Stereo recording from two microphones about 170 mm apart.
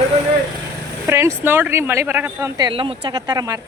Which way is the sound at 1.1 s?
15° right (ahead or behind).